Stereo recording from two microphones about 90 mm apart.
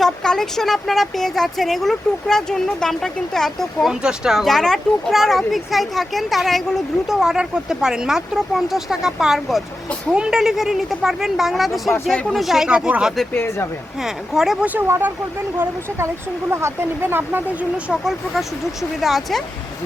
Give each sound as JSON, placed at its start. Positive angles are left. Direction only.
{"t": 0.0, "sound": "speech", "side_deg": 5}
{"t": 4.0, "sound": "speech", "side_deg": -5}
{"t": 13.3, "sound": "speech", "side_deg": 20}
{"t": 14.0, "sound": "speech", "side_deg": -5}
{"t": 14.6, "sound": "speech", "side_deg": -20}
{"t": 16.5, "sound": "speech", "side_deg": -30}